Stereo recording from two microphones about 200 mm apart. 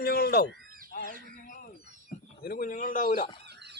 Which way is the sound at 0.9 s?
45° left (ahead or behind).